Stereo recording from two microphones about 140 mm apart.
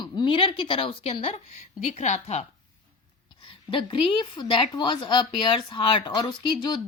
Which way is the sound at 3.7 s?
35° left (ahead or behind).